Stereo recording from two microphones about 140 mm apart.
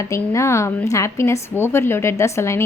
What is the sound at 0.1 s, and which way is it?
A woman's voice, 20° left (ahead or behind).